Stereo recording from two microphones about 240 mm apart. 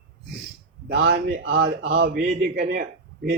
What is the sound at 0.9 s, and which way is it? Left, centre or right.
A man's voice, right.